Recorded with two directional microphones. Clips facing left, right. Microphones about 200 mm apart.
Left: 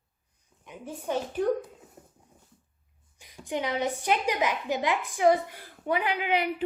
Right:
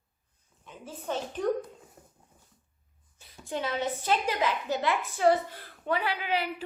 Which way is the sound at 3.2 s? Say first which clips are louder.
Left 2 dB; 15° left (ahead or behind).